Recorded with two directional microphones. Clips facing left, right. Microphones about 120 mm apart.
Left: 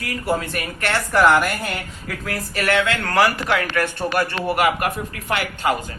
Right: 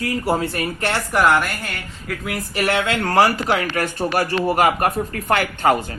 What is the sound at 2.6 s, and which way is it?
Speech, 25° right (ahead or behind).